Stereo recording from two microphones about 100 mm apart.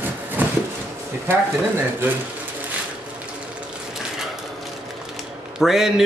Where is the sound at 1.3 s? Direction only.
25° right (ahead or behind).